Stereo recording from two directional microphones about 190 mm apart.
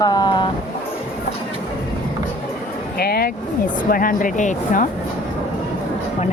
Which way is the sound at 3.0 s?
55° left (ahead or behind).